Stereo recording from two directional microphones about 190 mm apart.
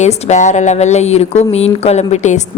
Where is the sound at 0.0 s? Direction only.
40° left (ahead or behind).